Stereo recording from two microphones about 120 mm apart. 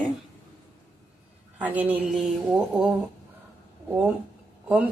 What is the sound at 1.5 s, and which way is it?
Speech, 15° right (ahead or behind).